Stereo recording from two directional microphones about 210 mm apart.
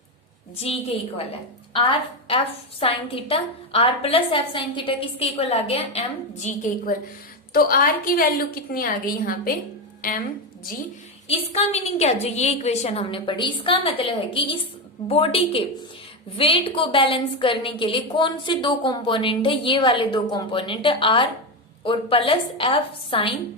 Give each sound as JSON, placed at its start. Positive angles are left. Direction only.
{"t": 0.5, "sound": "a woman's voice", "side_deg": 30}
{"t": 7.5, "sound": "a woman's voice", "side_deg": 45}
{"t": 11.3, "sound": "a woman's voice", "side_deg": 30}